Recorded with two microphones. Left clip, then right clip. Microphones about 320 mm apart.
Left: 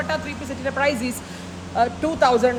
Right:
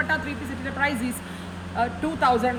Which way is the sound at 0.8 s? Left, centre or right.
Centre.